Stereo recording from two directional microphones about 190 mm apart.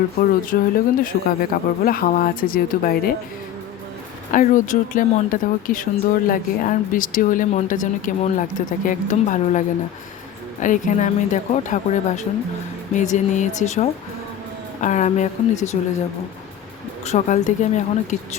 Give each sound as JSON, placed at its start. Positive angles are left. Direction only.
{"t": 0.5, "sound": "speech", "side_deg": 45}
{"t": 4.3, "sound": "speech", "side_deg": 45}
{"t": 17.1, "sound": "speech", "side_deg": 40}